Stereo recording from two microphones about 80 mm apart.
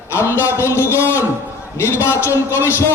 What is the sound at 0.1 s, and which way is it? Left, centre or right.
Speech, left.